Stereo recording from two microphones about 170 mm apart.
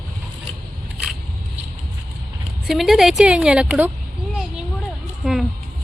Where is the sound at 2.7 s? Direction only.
Centre (ahead or behind).